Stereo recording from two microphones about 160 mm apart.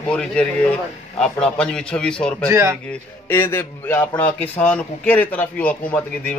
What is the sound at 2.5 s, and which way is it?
Speech, 20° right (ahead or behind).